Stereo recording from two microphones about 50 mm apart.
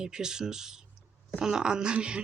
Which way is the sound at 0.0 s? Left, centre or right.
Centre.